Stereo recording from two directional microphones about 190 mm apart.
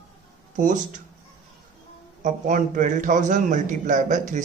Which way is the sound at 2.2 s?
45° right (ahead or behind).